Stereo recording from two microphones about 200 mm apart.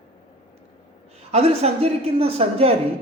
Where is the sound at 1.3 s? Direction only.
30° right (ahead or behind).